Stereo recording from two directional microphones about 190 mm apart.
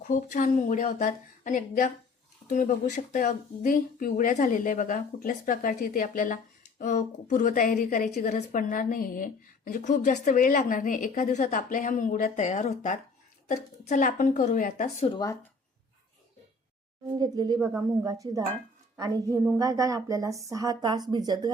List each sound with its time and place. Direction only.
0.0 s a woman's voice: 40° left (ahead or behind)
17.2 s a woman's voice: 20° right (ahead or behind)